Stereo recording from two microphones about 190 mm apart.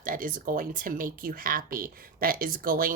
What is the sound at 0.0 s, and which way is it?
Speech, 45° right (ahead or behind).